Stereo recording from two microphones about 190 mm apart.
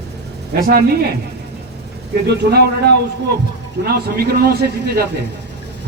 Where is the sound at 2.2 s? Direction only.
60° right (ahead or behind).